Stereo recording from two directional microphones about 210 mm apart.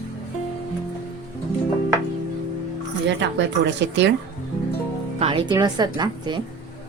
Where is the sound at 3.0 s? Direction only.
55° right (ahead or behind).